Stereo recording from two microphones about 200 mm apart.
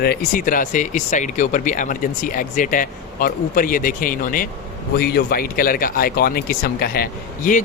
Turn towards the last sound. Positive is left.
turn(degrees=45)  # may be behind; listen again after turning